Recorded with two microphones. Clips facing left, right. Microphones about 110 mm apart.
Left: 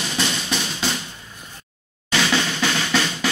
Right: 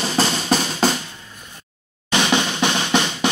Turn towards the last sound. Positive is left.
turn(degrees=-20)  # may be behind; listen again after turning